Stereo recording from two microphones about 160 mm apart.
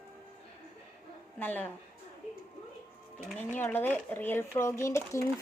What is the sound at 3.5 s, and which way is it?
Speech, 10° left (ahead or behind).